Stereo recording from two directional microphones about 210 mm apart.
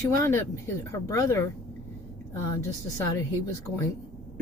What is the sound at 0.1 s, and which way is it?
Speech, 15° left (ahead or behind).